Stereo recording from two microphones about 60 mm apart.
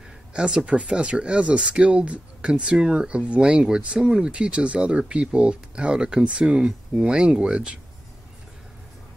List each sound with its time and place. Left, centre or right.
0.3 s speech: centre